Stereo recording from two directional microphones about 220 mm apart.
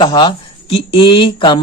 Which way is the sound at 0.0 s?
20° left (ahead or behind).